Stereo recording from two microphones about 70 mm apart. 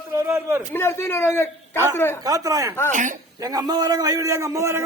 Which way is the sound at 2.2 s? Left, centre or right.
Right.